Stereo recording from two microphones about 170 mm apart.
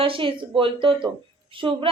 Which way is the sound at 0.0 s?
30° right (ahead or behind).